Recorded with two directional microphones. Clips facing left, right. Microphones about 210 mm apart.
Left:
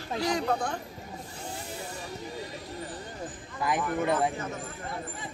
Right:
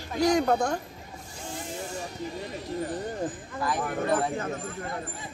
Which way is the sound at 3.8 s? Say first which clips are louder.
Right 1 dB; 50° right (ahead or behind).